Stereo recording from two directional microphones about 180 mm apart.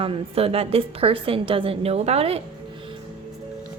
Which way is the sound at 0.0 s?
30° right (ahead or behind).